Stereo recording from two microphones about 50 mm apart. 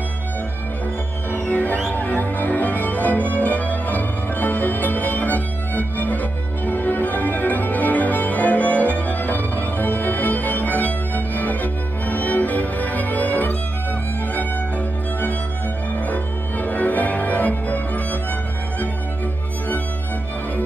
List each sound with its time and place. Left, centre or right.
1.3 s music: left
16.1 s music: left